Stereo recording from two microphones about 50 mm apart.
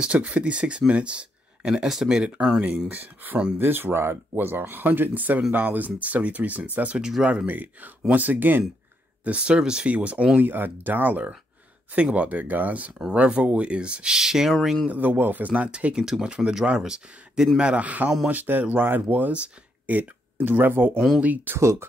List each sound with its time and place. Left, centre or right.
0.0 s speech: right; by 2.2 s centre
3.5 s speech: right
7.0 s speech: centre
7.4 s speech: right
9.2 s speech: right
9.8 s speech: right
10.4 s speech: right; by 14.5 s centre
14.9 s speech: right
15.7 s speech: centre
17.6 s speech: right
19.3 s speech: right
20.0 s speech: right
21.2 s speech: right
21.5 s speech: right